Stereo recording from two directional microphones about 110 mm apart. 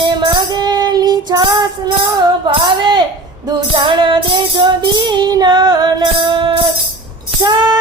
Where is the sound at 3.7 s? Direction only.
50° right (ahead or behind).